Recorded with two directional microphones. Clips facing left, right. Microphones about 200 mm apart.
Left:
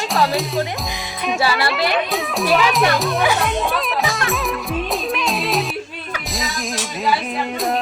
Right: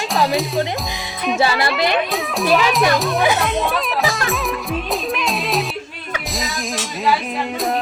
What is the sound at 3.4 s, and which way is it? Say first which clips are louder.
Music: right 1 dB; centre (ahead or behind).